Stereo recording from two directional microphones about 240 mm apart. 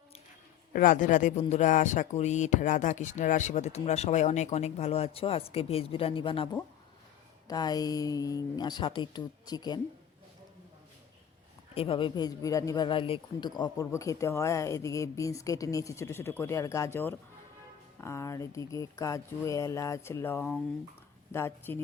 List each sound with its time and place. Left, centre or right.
0.7 s speech: left; by 9.8 s centre
11.7 s speech: left